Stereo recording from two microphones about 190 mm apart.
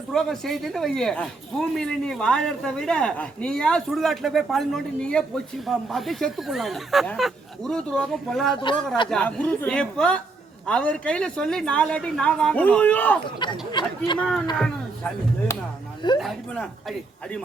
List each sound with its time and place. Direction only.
0.1 s speech: centre (ahead or behind)
13.2 s speech: 25° left (ahead or behind)
14.2 s speech: 5° left (ahead or behind)
16.0 s speech: 25° left (ahead or behind)